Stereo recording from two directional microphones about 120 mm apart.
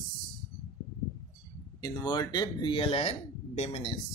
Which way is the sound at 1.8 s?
35° left (ahead or behind).